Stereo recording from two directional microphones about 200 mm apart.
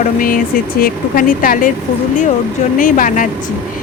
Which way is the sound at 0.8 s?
45° left (ahead or behind).